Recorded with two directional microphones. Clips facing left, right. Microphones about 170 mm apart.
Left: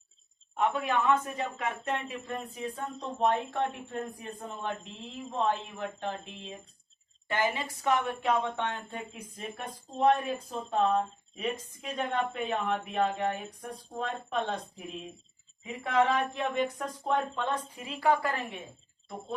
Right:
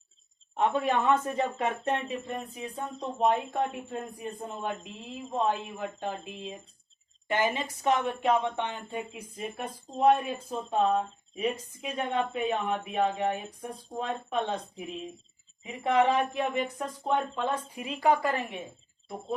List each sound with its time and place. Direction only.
0.5 s a sound: 25° right (ahead or behind)
1.5 s speech: 25° right (ahead or behind); by 6.3 s 10° right (ahead or behind)
7.3 s speech: 20° right (ahead or behind); by 14.8 s centre (ahead or behind)
15.6 s a sound: 20° right (ahead or behind)
16.6 s speech: 5° right (ahead or behind)
17.8 s speech: 15° right (ahead or behind)